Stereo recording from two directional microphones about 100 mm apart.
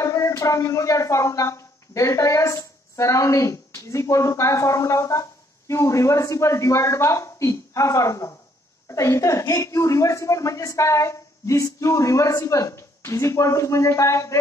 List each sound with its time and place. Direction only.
0.0 s a woman's voice: 30° left (ahead or behind)